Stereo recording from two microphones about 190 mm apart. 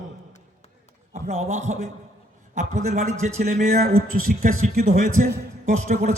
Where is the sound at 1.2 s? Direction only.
35° right (ahead or behind).